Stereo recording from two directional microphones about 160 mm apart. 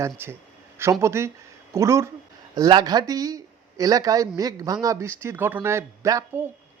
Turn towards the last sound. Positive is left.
turn(degrees=-20)  # may be behind; listen again after turning